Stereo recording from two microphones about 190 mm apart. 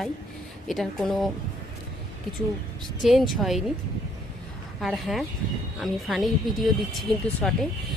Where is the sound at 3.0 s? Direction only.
Centre (ahead or behind).